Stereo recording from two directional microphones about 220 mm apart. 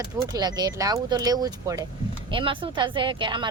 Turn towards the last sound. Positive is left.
turn(degrees=-20)  # may be behind; listen again after turning